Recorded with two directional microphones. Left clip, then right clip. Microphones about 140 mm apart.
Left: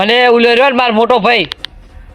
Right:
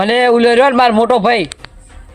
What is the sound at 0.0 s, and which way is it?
Speech, 5° right (ahead or behind).